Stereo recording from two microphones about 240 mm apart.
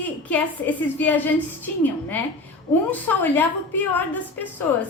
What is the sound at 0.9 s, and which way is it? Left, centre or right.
A woman's voice, centre.